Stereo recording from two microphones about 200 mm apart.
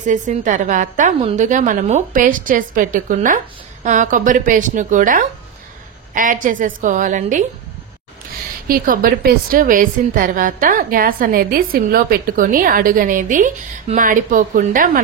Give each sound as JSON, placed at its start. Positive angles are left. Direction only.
{"t": 0.0, "sound": "a woman's voice", "side_deg": -40}
{"t": 8.6, "sound": "a woman's voice", "side_deg": -45}